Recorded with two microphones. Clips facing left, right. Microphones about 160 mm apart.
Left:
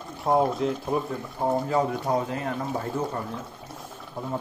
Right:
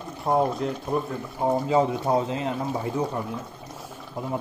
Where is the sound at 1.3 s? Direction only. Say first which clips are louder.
Right 3 dB; 10° right (ahead or behind).